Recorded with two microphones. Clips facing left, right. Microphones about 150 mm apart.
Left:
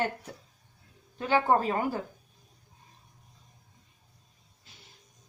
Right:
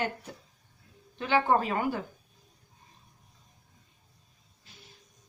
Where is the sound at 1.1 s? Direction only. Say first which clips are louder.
Left 1 dB; 40° left (ahead or behind).